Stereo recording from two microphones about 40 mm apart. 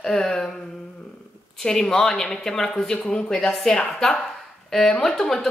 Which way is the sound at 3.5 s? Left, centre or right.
Centre.